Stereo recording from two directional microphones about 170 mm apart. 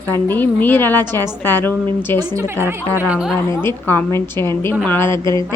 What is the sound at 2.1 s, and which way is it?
Speech, 25° right (ahead or behind).